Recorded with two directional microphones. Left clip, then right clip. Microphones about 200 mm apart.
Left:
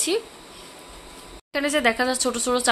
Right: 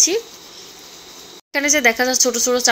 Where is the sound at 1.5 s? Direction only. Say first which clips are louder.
Right 6 dB; 10° right (ahead or behind).